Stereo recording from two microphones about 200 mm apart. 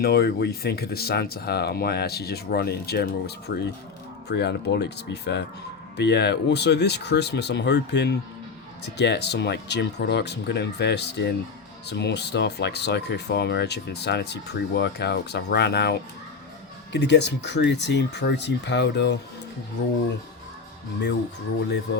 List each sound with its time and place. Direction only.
0.0 s speech: 50° left (ahead or behind)